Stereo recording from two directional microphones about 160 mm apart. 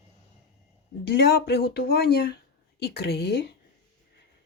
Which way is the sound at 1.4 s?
85° left.